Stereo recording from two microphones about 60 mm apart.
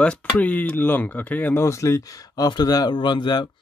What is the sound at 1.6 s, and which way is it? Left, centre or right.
Speech, left.